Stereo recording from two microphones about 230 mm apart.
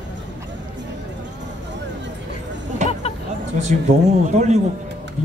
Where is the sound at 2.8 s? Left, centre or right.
Right.